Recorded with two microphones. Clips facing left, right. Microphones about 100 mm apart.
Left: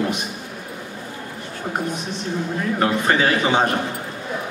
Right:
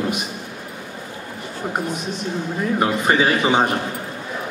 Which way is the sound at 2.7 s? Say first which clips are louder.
Right 1 dB; 15° right (ahead or behind).